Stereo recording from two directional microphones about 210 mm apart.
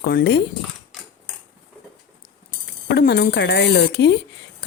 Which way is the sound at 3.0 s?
45° left (ahead or behind).